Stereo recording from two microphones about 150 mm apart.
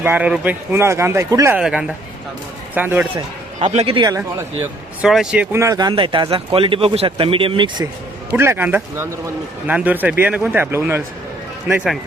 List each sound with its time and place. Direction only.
0.0 s speech: 10° right (ahead or behind)
1.5 s speech: 5° right (ahead or behind)
3.6 s a man's voice: 45° right (ahead or behind)
5.0 s speech: 5° right (ahead or behind); by 7.9 s 30° right (ahead or behind)
8.3 s speech: 15° right (ahead or behind)